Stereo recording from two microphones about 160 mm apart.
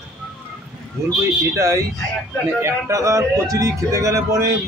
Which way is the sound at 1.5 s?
20° right (ahead or behind).